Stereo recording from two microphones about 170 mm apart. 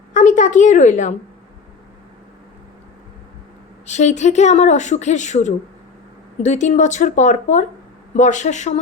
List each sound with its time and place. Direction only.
0.1 s a woman's voice: 50° left (ahead or behind)
3.8 s speech: 45° left (ahead or behind)